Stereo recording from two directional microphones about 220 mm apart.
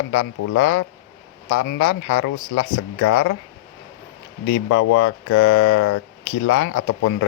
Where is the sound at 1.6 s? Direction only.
65° left (ahead or behind); by 3.4 s 90° left.